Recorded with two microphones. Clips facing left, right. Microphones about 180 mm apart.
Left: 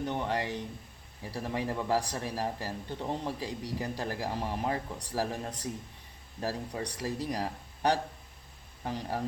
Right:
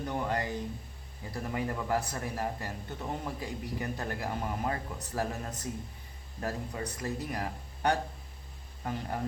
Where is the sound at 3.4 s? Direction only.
90° left.